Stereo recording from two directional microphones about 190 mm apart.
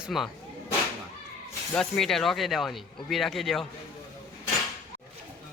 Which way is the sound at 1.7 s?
Centre (ahead or behind).